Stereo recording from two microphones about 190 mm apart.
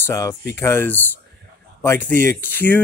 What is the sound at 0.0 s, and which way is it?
Speech, 15° left (ahead or behind).